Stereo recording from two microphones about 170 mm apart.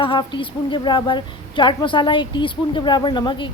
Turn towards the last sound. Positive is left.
turn(degrees=25)  # may be behind; listen again after turning